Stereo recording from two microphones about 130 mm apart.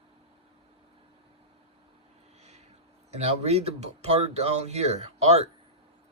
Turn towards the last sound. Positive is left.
turn(degrees=-55)  # may be behind; listen again after turning